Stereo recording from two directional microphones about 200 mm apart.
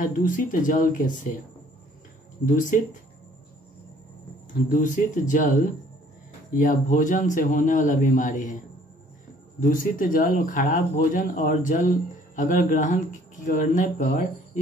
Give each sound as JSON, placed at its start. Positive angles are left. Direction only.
{"t": 0.0, "sound": "a man's voice", "side_deg": 40}
{"t": 2.4, "sound": "a man's voice", "side_deg": 40}
{"t": 4.6, "sound": "a man's voice", "side_deg": 40}
{"t": 9.6, "sound": "a man's voice", "side_deg": 40}